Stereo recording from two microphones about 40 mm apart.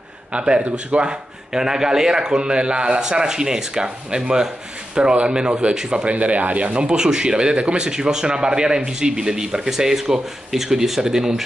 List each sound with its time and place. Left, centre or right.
0.3 s speech: right
6.0 s a man's voice: right; by 11.4 s centre